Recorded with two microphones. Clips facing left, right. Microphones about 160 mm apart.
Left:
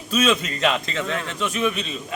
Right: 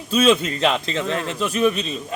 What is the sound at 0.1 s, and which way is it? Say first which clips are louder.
A man's voice: right 4 dB; 30° right (ahead or behind).